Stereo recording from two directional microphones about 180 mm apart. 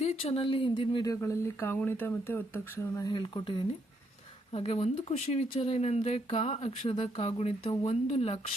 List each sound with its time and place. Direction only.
0.0 s speech: 35° left (ahead or behind); by 3.1 s 10° left (ahead or behind)
3.1 s speech: 25° left (ahead or behind)
4.5 s speech: 35° left (ahead or behind)